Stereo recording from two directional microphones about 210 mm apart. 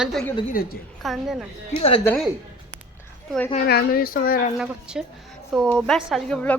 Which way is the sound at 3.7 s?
45° left (ahead or behind).